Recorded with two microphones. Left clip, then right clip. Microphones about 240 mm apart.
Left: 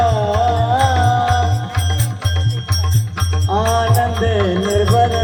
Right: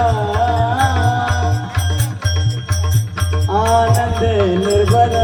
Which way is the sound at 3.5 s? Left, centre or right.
Left.